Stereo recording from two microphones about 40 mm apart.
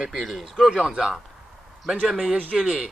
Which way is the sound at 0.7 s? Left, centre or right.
Centre.